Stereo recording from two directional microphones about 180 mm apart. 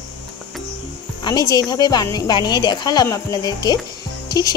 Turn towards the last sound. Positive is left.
turn(degrees=20)  # may be behind; listen again after turning